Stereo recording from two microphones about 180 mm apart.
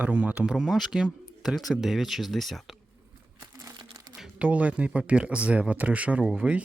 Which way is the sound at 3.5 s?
20° right (ahead or behind).